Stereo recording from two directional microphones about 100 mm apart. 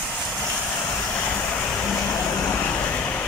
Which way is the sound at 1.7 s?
15° left (ahead or behind).